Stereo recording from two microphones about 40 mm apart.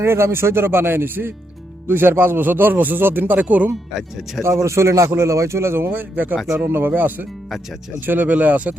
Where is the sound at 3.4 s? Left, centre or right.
Right.